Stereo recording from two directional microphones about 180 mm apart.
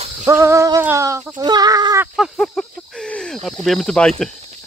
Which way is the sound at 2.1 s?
Centre (ahead or behind).